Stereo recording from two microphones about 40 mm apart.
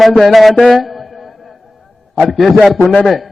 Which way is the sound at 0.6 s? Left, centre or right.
Centre.